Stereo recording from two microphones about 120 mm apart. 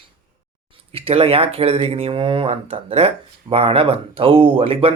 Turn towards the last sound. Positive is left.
turn(degrees=-50)  # may be behind; listen again after turning